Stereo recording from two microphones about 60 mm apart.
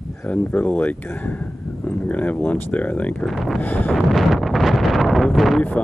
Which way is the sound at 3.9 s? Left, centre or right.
Centre.